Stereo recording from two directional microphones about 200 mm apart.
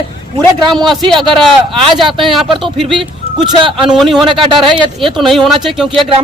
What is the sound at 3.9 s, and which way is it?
Speech, centre (ahead or behind).